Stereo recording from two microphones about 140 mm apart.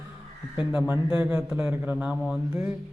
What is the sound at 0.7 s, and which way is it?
A man's voice, 10° right (ahead or behind).